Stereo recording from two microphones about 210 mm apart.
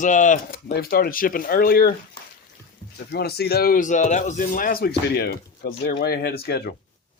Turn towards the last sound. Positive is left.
turn(degrees=50)  # may be behind; listen again after turning